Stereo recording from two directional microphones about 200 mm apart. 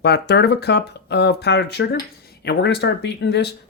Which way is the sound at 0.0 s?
55° left (ahead or behind).